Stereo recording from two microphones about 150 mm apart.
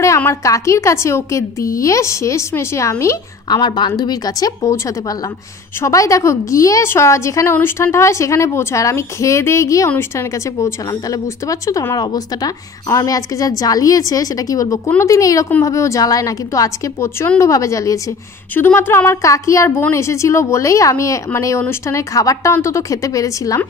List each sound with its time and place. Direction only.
0.0 s a woman's voice: 20° left (ahead or behind)